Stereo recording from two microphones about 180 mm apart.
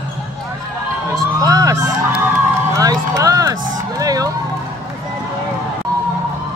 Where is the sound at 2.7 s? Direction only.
20° right (ahead or behind).